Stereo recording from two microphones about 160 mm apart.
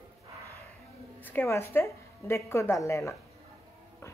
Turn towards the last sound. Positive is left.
turn(degrees=20)  # may be behind; listen again after turning